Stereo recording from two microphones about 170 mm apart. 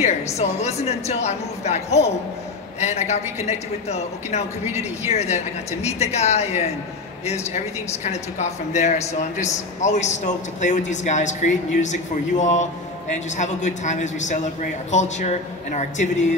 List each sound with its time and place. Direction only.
0.4 s a woman's voice: 40° left (ahead or behind)